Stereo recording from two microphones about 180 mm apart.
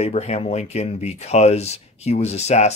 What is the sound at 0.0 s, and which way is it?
Speech, 35° left (ahead or behind).